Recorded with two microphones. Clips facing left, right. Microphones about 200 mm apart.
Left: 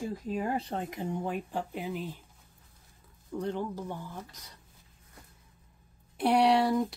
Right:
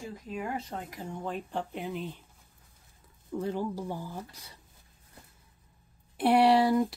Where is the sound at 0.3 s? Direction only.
35° left (ahead or behind); by 1.3 s 15° left (ahead or behind).